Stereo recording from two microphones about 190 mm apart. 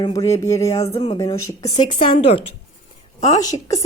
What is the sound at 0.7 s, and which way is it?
Speech, 35° left (ahead or behind).